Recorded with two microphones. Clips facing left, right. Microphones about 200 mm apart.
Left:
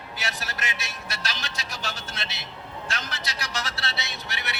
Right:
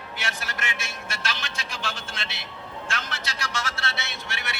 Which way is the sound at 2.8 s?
35° left (ahead or behind).